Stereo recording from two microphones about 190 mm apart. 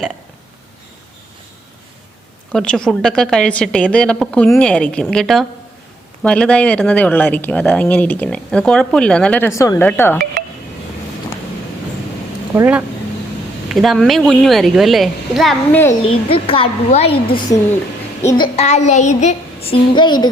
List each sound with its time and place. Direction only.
2.5 s a woman's voice: 5° left (ahead or behind)
12.5 s a woman's voice: 10° right (ahead or behind)
15.9 s a woman's voice: 30° left (ahead or behind)
18.2 s a child's voice: 15° left (ahead or behind)
18.5 s a woman's voice: 35° left (ahead or behind)